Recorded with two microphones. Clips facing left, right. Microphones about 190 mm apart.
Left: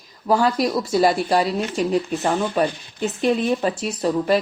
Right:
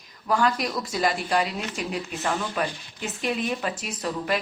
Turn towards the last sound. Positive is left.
turn(degrees=30)  # may be behind; listen again after turning